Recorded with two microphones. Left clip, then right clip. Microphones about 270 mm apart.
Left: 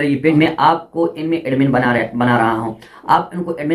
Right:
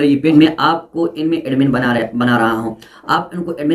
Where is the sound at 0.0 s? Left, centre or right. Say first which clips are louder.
Right 3 dB; centre.